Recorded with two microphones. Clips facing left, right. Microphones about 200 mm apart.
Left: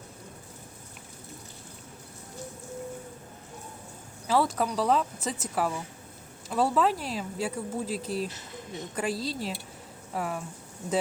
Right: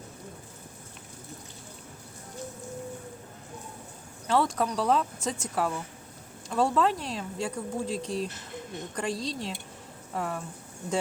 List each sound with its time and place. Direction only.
4.3 s speech: 5° left (ahead or behind)